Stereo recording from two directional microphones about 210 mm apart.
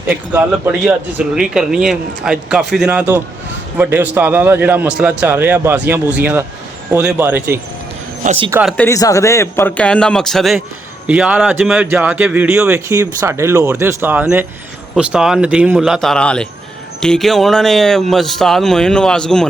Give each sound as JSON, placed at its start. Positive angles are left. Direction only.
{"t": 0.3, "sound": "speech", "side_deg": -5}
{"t": 8.2, "sound": "speech", "side_deg": -35}
{"t": 8.6, "sound": "a man's voice", "side_deg": 5}